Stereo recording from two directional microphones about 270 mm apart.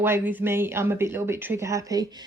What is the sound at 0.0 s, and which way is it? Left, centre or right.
Speech, centre.